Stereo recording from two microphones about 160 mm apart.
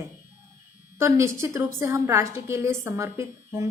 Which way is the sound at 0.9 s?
15° right (ahead or behind).